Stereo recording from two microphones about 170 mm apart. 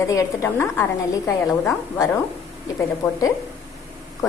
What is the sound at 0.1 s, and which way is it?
A woman's voice, 15° left (ahead or behind).